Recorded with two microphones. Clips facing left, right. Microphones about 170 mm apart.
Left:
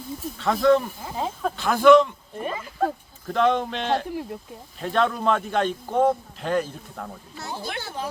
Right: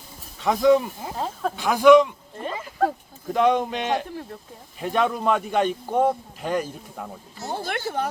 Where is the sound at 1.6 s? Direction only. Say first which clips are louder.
Right 1 dB; 10° right (ahead or behind).